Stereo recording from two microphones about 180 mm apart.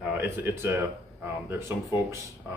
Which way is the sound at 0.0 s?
10° right (ahead or behind).